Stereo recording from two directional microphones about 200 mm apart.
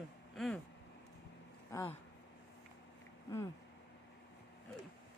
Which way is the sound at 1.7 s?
15° left (ahead or behind).